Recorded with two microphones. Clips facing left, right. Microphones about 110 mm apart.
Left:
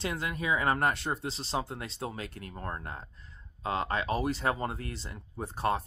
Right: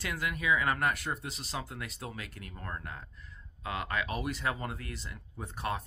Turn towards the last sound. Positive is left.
turn(degrees=30)  # may be behind; listen again after turning